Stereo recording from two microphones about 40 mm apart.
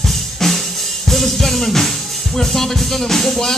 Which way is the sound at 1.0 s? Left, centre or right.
Centre.